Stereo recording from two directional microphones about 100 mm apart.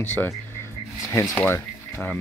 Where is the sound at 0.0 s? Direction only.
20° left (ahead or behind).